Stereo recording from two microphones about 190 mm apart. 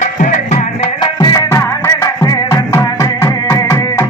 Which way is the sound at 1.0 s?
20° left (ahead or behind).